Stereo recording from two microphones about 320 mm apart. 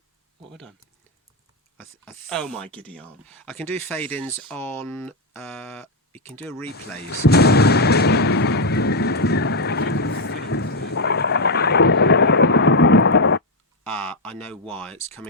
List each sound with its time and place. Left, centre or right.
2.0 s speech: centre
6.7 s artillery fire: left
13.9 s speech: centre